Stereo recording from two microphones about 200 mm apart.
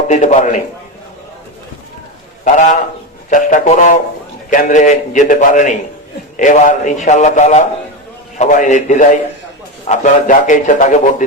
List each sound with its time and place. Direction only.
0.1 s a man's voice: 35° left (ahead or behind)
2.4 s a man's voice: 40° left (ahead or behind)